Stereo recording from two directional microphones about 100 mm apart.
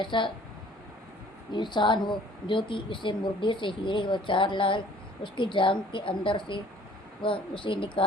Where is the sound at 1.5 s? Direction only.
50° left (ahead or behind).